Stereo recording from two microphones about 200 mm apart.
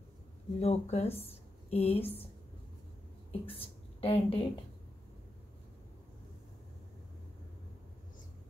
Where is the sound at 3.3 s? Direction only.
30° left (ahead or behind).